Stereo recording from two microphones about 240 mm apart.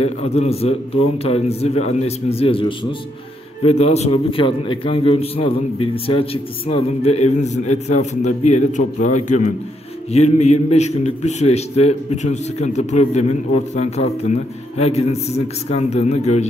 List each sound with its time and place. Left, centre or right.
0.0 s a man's voice: left